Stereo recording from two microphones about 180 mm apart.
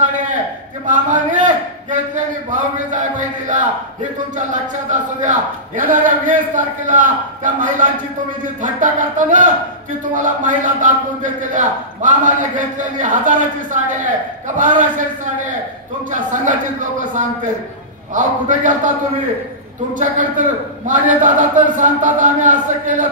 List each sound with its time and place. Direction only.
0.8 s a man's voice: 45° right (ahead or behind)
16.1 s a man's voice: 45° right (ahead or behind)
19.9 s a man's voice: 45° right (ahead or behind)